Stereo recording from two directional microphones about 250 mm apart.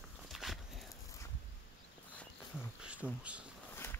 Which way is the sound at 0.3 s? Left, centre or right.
Centre.